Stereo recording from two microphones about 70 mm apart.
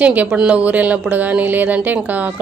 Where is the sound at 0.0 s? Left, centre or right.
Right.